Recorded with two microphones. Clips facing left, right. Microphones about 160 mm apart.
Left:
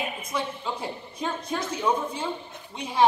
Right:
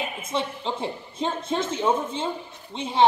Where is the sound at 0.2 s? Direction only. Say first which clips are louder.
Right 2 dB; 25° right (ahead or behind).